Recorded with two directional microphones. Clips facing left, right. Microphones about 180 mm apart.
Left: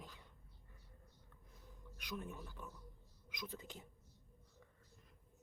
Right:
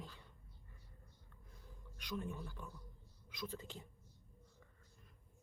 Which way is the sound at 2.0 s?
5° left (ahead or behind).